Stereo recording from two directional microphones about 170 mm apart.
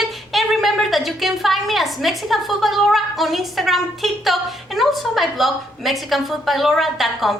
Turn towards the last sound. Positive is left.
turn(degrees=0)  # may be behind; listen again after turning